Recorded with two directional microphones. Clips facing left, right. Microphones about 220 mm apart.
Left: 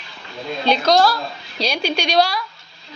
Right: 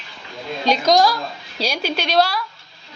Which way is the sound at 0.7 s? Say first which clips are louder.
Even; 15° right (ahead or behind).